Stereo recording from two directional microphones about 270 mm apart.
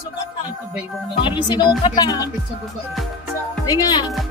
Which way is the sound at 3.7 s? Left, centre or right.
Centre.